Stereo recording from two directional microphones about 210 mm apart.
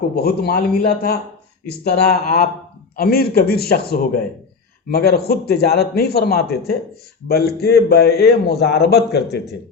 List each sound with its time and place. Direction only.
0.2 s a man's voice: 50° left (ahead or behind)